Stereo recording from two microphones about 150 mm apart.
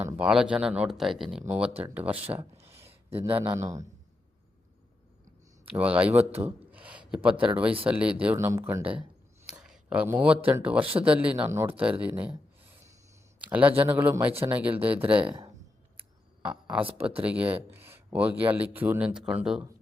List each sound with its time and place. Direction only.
0.2 s speech: 5° right (ahead or behind)
2.4 s a sound: 15° right (ahead or behind)
3.2 s speech: 35° right (ahead or behind)
5.7 s speech: 10° right (ahead or behind)
8.4 s speech: 20° right (ahead or behind)
9.5 s a sound: 5° right (ahead or behind)
10.6 s speech: 10° right (ahead or behind)
15.3 s speech: 35° right (ahead or behind)
16.0 s a sound: 5° right (ahead or behind)
17.2 s speech: 10° right (ahead or behind)